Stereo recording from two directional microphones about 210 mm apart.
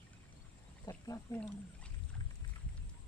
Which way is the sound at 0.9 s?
15° left (ahead or behind).